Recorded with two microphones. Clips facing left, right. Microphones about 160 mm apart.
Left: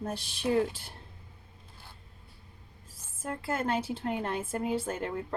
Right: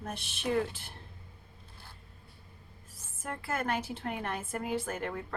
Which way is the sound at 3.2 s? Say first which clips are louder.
Left 3 dB; 30° left (ahead or behind).